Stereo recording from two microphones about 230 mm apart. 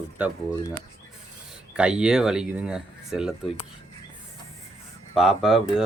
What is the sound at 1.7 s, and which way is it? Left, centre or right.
Speech, centre.